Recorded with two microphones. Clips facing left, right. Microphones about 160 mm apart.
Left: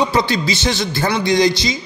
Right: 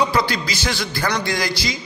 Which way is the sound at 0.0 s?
20° left (ahead or behind).